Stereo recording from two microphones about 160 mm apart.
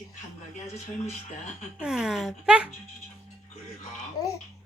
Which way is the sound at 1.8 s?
5° right (ahead or behind).